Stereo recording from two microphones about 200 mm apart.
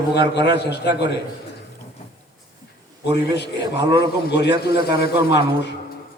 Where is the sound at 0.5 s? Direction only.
55° left (ahead or behind).